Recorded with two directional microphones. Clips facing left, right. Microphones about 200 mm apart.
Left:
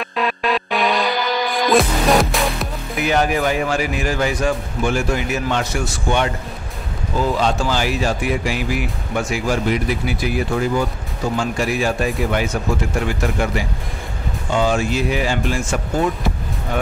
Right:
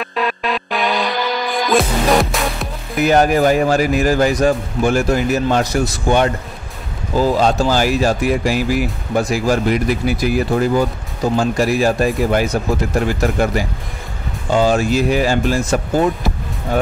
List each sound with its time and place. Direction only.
0.0 s music: centre (ahead or behind)
3.0 s speech: 45° right (ahead or behind)